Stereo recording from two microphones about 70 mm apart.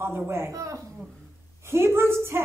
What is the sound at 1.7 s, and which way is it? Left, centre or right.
Speech, right.